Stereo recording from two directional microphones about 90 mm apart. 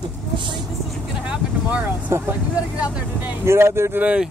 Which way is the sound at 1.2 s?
15° right (ahead or behind).